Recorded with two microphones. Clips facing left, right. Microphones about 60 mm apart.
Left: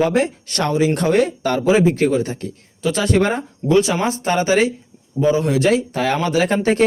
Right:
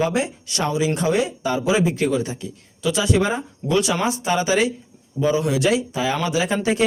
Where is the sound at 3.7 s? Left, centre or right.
Left.